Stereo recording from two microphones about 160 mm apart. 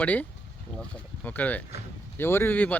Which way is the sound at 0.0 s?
10° left (ahead or behind).